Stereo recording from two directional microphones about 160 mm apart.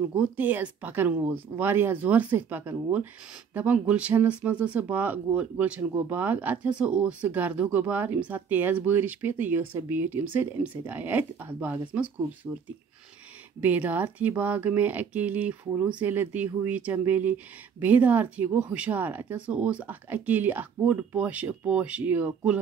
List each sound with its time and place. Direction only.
0.1 s speech: 10° right (ahead or behind)
13.6 s speech: 10° right (ahead or behind)